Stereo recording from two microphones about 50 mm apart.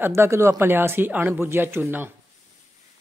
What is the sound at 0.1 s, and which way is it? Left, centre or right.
Speech, right.